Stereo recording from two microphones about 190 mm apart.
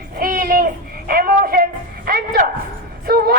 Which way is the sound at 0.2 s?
50° right (ahead or behind).